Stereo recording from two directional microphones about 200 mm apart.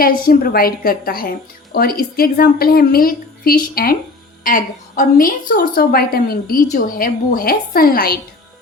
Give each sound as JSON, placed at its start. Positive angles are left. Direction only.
{"t": 0.0, "sound": "a woman's voice", "side_deg": 45}